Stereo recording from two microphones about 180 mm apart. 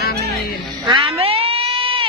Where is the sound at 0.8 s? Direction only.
30° right (ahead or behind).